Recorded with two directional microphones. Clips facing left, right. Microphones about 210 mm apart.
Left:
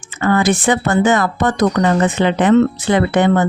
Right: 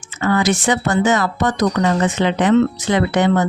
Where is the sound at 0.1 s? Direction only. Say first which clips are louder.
Left 2 dB; 55° left (ahead or behind).